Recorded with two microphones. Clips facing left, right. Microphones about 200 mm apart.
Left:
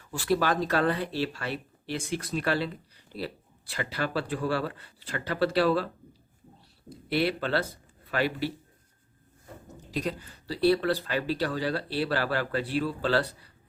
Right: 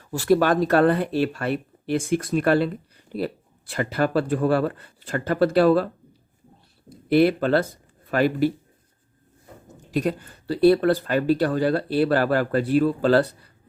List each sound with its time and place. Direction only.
0.0 s speech: 40° right (ahead or behind)
7.1 s speech: 50° right (ahead or behind)
9.9 s speech: 50° right (ahead or behind)